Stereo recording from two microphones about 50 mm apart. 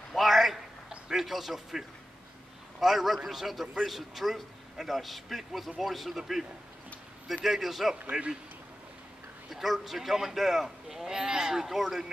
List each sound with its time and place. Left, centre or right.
0.1 s a sound: centre
2.8 s a man's voice: centre
7.4 s a man's voice: centre
7.9 s a man's voice: right
9.5 s a man's voice: centre